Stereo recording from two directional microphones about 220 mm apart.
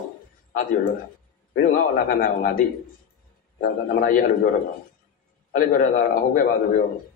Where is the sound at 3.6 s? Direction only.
40° left (ahead or behind).